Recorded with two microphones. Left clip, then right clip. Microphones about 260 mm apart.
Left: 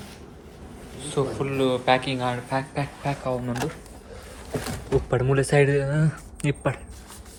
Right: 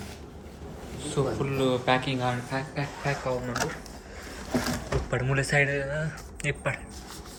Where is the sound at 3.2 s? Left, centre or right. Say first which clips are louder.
Left 3 dB; centre.